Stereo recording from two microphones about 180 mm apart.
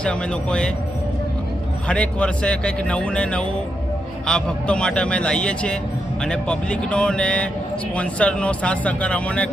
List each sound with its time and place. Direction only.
0.0 s a man's voice: 5° left (ahead or behind)
1.9 s a man's voice: 5° left (ahead or behind)